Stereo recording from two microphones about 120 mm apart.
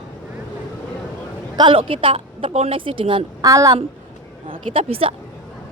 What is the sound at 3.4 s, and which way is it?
Speech, 30° right (ahead or behind).